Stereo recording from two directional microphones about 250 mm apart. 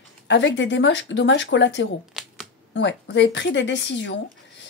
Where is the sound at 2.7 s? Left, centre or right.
Left.